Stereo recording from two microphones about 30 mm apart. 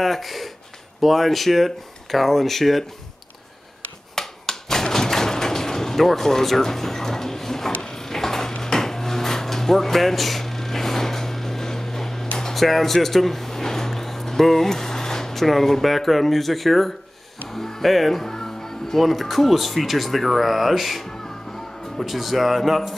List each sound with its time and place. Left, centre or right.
0.0 s speech: centre
4.1 s a sound: centre
7.8 s drawer open or close: centre
12.5 s a sound: centre
15.3 s speech: centre
17.5 s music: centre
18.9 s speech: centre